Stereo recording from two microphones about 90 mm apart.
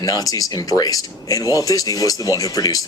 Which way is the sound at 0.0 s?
40° left (ahead or behind).